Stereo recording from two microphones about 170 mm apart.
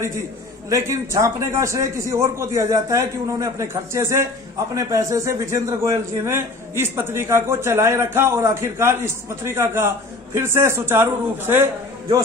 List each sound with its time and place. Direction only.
0.7 s a man's voice: 15° right (ahead or behind)